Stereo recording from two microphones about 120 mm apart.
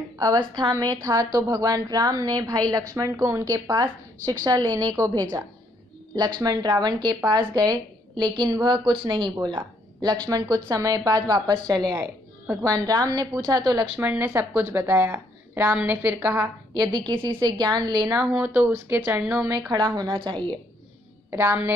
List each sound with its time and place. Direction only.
0.2 s a woman's voice: 35° right (ahead or behind)
13.9 s a woman's voice: 15° right (ahead or behind)
16.7 s a woman's voice: 35° right (ahead or behind)
18.3 s a woman's voice: 15° right (ahead or behind)
19.7 s a woman's voice: 35° right (ahead or behind)
21.3 s a woman's voice: 20° right (ahead or behind)